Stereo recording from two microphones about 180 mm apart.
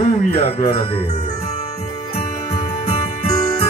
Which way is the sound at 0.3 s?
35° left (ahead or behind).